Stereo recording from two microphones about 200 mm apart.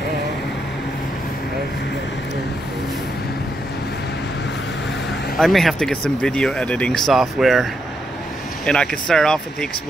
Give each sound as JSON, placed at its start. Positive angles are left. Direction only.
{"t": 5.4, "sound": "speech", "side_deg": 0}
{"t": 8.6, "sound": "speech", "side_deg": 5}